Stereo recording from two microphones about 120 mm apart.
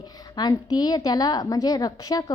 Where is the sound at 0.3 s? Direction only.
35° left (ahead or behind).